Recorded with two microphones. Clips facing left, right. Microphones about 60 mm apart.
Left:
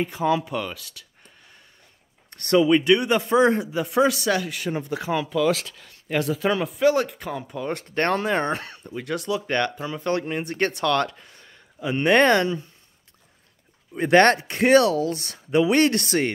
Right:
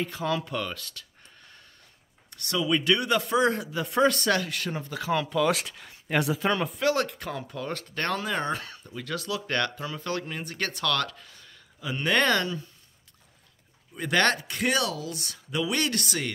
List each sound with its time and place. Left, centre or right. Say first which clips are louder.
0.0 s speech: left 6 dB; centre
2.3 s speech: left 11 dB; left
2.7 s speech: left 6 dB; left
3.8 s speech: left 2 dB; centre
4.7 s speech: left 5 dB; left
5.1 s speech: left 2 dB; centre
7.8 s speech: left 8 dB; left
8.9 s speech: left 6 dB; left
13.9 s speech: left 8 dB; left